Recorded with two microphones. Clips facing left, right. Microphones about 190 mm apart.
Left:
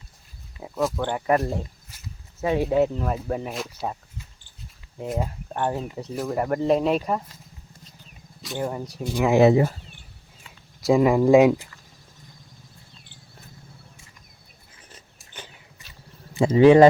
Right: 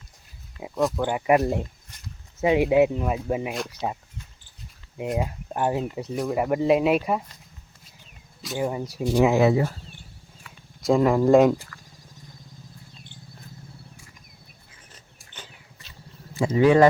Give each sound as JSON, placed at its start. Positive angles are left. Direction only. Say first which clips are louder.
{"t": 0.8, "sound": "speech", "louder": "right 1 dB", "side_deg": 0}
{"t": 1.0, "sound": "speech", "louder": "right 3 dB", "side_deg": -10}
{"t": 1.9, "sound": "a sound", "louder": "left 1 dB", "side_deg": 5}
{"t": 2.4, "sound": "speech", "louder": "right 3 dB", "side_deg": -15}
{"t": 5.0, "sound": "speech", "louder": "right 1 dB", "side_deg": 0}
{"t": 8.4, "sound": "speech", "louder": "right 2 dB", "side_deg": -5}
{"t": 9.3, "sound": "speech", "louder": "left 3 dB", "side_deg": 20}
{"t": 10.8, "sound": "speech", "louder": "left 1 dB", "side_deg": 5}
{"t": 11.5, "sound": "a sound", "louder": "left 1 dB", "side_deg": 20}
{"t": 16.3, "sound": "speech", "louder": "left 4 dB", "side_deg": 25}